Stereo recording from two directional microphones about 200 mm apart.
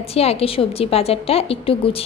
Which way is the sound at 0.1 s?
30° left (ahead or behind).